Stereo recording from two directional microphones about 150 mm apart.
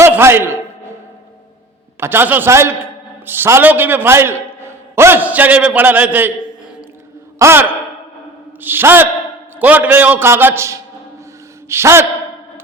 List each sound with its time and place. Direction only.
0.0 s a sound: 15° right (ahead or behind)
2.0 s a man's voice: 15° right (ahead or behind)
7.3 s a man's voice: 15° right (ahead or behind)